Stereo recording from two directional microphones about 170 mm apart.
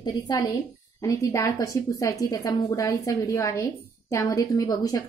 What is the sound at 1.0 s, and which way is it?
A woman's voice, 20° left (ahead or behind).